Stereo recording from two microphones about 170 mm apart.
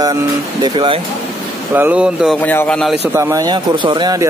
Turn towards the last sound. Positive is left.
turn(degrees=-25)  # may be behind; listen again after turning